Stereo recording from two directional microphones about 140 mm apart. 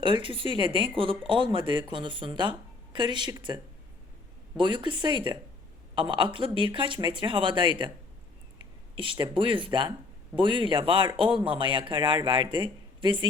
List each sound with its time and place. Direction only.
0.0 s speech: 35° right (ahead or behind)